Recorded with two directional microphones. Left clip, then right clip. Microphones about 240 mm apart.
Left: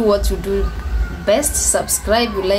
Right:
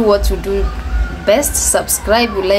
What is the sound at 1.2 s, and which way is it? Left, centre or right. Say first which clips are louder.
A woman's voice: right 3 dB; centre.